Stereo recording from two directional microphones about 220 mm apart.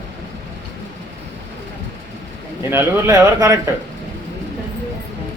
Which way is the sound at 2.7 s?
15° right (ahead or behind).